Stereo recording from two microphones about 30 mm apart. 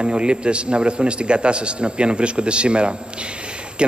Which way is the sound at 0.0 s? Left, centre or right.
Right.